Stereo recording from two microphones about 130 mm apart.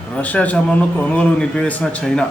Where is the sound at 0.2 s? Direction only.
10° left (ahead or behind).